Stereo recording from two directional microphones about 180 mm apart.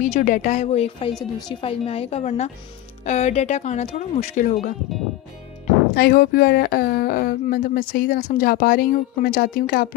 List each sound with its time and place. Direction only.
0.0 s speech: 45° left (ahead or behind)
5.9 s speech: 60° left (ahead or behind)